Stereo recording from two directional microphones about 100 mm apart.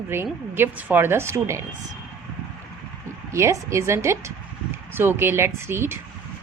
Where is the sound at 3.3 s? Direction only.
30° right (ahead or behind).